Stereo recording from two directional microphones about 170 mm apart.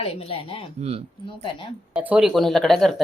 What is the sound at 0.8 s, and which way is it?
Speech, 35° right (ahead or behind).